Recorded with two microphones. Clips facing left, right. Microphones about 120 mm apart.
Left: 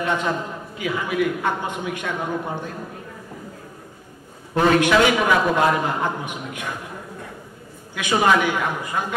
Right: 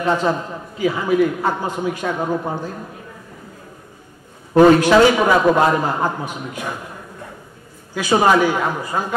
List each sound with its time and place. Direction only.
0.0 s a man's voice: 35° right (ahead or behind)
4.6 s a man's voice: 35° right (ahead or behind)
7.9 s a man's voice: 35° right (ahead or behind)